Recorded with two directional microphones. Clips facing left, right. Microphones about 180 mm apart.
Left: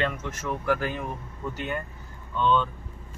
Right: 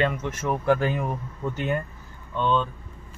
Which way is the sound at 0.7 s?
30° right (ahead or behind).